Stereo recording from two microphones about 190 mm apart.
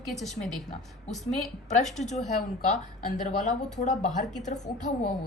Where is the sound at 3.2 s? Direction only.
40° left (ahead or behind).